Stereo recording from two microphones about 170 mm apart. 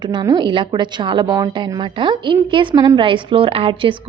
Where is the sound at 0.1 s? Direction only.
25° right (ahead or behind).